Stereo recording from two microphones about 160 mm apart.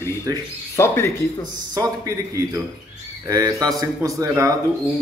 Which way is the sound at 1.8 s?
20° right (ahead or behind).